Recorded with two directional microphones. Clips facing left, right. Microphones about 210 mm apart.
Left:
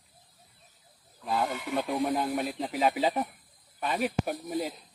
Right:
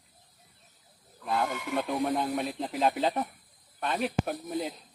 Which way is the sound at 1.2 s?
5° left (ahead or behind).